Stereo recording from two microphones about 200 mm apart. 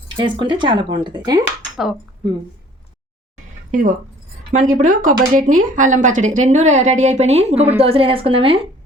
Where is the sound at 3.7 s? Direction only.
40° right (ahead or behind).